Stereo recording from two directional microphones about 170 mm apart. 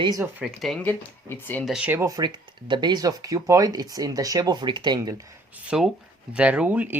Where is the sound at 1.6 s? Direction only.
5° right (ahead or behind).